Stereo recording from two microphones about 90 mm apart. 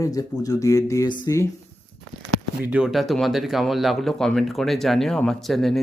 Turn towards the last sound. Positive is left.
turn(degrees=0)  # may be behind; listen again after turning